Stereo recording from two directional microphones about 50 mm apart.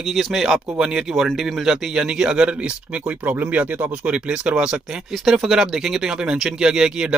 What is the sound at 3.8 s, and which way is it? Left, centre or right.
Speech, right.